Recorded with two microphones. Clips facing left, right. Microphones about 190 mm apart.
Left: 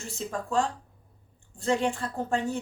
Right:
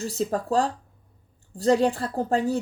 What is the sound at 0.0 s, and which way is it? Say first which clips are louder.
A woman's voice: right 8 dB; 35° right (ahead or behind).